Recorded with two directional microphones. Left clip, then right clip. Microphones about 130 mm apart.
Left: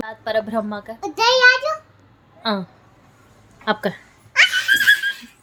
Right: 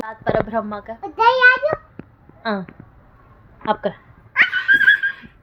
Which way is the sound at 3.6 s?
65° left (ahead or behind).